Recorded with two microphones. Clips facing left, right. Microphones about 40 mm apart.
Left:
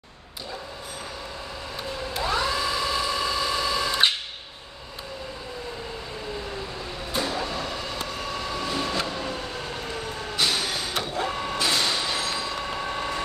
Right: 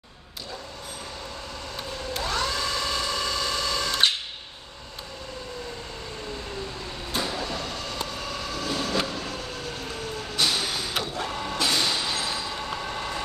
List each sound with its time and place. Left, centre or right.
1.8 s vehicle: centre
7.1 s printer: centre
7.4 s train: centre
9.0 s vehicle: centre